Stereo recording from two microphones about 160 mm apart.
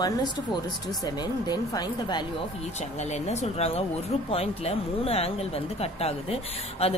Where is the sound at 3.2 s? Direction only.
40° left (ahead or behind).